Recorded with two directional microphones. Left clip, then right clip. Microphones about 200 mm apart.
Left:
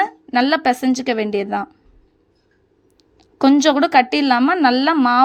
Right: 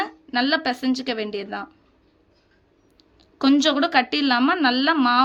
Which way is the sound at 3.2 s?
30° left (ahead or behind).